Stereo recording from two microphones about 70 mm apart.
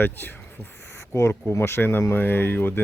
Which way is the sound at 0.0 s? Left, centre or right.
Left.